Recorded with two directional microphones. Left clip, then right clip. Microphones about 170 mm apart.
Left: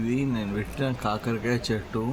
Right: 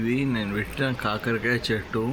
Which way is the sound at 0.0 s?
5° right (ahead or behind).